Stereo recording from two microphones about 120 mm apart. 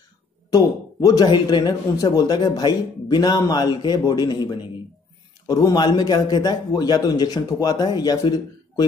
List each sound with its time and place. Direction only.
0.5 s speech: 30° left (ahead or behind)